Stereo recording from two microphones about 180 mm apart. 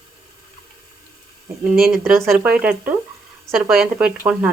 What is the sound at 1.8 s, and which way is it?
Speech, centre (ahead or behind).